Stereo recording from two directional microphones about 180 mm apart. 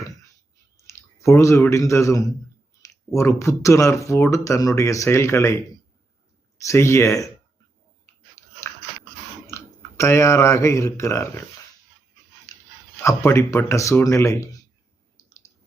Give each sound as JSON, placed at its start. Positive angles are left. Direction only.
{"t": 0.9, "sound": "speech", "side_deg": 15}
{"t": 6.7, "sound": "speech", "side_deg": 15}
{"t": 8.7, "sound": "dog", "side_deg": 10}
{"t": 9.5, "sound": "speech", "side_deg": 15}
{"t": 12.5, "sound": "a sound", "side_deg": 15}
{"t": 13.0, "sound": "speech", "side_deg": 15}